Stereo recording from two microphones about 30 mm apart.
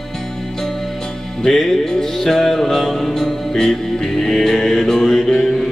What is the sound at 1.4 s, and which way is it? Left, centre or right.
Music, centre.